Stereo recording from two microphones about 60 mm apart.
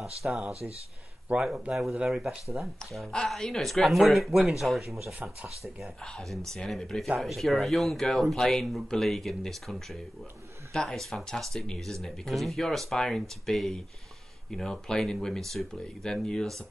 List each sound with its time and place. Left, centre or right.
0.2 s speech: centre
1.3 s speech: right
1.7 s speech: centre
3.1 s speech: centre
6.0 s speech: centre